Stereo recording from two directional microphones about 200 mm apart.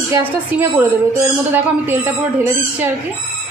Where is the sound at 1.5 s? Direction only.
10° right (ahead or behind).